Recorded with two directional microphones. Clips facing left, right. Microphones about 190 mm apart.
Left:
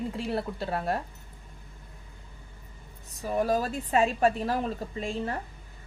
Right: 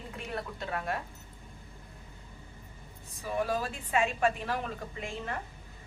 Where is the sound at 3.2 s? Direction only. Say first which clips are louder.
Left 5 dB; 40° left (ahead or behind).